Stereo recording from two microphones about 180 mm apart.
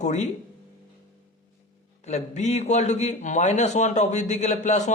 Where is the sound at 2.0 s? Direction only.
40° left (ahead or behind).